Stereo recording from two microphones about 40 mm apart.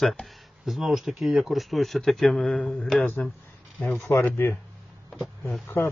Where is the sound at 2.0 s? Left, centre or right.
Centre.